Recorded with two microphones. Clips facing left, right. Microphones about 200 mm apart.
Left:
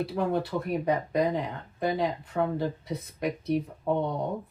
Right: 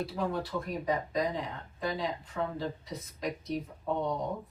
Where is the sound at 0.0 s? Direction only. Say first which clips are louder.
Left 5 dB; 60° left (ahead or behind).